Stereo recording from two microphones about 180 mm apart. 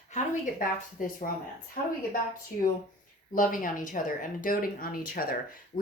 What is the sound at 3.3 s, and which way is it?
Speech, 50° left (ahead or behind).